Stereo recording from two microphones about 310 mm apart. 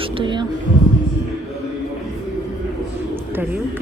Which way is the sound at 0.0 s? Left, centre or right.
Centre.